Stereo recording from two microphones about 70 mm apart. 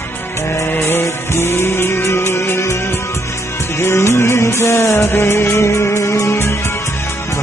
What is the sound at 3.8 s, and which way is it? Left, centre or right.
Music, left.